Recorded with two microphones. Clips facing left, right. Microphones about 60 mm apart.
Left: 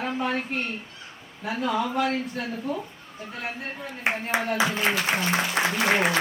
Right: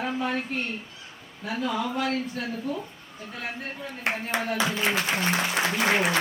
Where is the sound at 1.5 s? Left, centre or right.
Centre.